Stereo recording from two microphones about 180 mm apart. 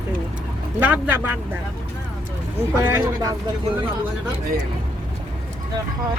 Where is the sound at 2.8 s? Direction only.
15° right (ahead or behind).